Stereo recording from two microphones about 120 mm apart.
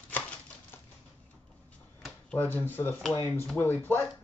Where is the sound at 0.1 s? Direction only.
15° left (ahead or behind).